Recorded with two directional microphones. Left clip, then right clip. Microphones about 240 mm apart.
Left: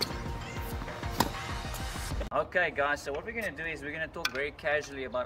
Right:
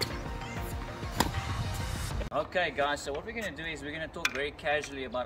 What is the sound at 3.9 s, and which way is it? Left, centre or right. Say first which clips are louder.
Speech: right 3 dB; centre.